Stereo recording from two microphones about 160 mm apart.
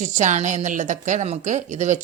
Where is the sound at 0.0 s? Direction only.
50° right (ahead or behind).